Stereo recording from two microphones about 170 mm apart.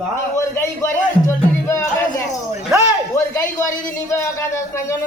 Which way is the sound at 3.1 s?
15° left (ahead or behind).